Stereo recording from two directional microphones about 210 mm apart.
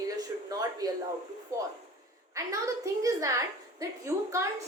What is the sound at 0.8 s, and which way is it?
Speech, 20° right (ahead or behind).